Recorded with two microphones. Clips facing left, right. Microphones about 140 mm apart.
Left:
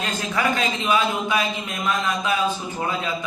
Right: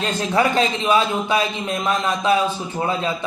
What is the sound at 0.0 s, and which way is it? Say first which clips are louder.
A man's voice: right 5 dB; 35° right (ahead or behind).